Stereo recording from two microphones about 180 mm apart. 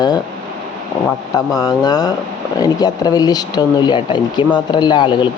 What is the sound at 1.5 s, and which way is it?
Speech, 20° left (ahead or behind).